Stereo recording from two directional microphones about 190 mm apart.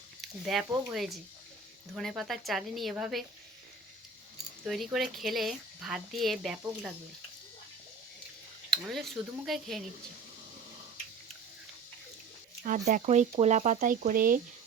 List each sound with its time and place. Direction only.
0.4 s speech: centre (ahead or behind)
4.6 s speech: centre (ahead or behind)
8.7 s speech: centre (ahead or behind)
12.6 s speech: 40° right (ahead or behind)